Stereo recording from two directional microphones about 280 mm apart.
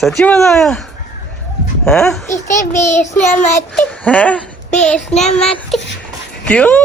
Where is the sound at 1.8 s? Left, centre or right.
Centre.